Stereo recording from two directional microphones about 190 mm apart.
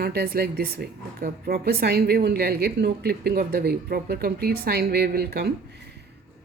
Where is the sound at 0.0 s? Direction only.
55° right (ahead or behind).